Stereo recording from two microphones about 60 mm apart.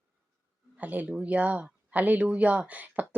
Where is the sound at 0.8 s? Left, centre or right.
Right.